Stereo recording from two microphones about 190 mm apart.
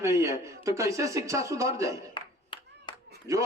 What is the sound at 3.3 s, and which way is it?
Speech, 15° right (ahead or behind).